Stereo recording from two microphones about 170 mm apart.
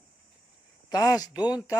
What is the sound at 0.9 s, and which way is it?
Speech, 20° left (ahead or behind).